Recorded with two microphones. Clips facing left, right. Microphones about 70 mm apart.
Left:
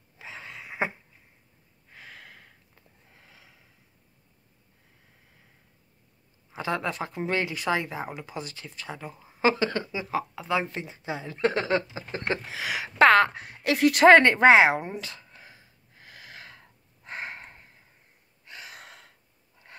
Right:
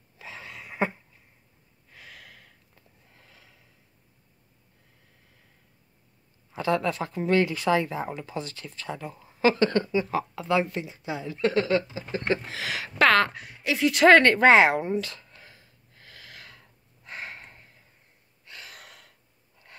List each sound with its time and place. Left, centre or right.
0.2 s a sound: centre
1.9 s a sound: left
3.2 s snort: centre
6.5 s speech: centre
9.6 s speech: centre
10.7 s speech: left
12.3 s speech: centre
13.4 s speech: left
14.0 s a sound: left
18.4 s gasp: left